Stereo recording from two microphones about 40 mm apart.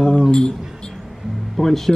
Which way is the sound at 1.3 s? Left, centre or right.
Centre.